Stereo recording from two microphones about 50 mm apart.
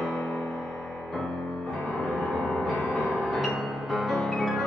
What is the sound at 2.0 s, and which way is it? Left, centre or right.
Music, centre.